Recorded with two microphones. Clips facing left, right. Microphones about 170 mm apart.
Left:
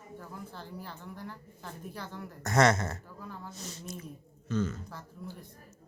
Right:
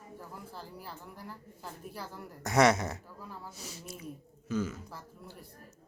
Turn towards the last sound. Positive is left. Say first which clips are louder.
# left 4 dB
turn(degrees=-10)  # may be behind; listen again after turning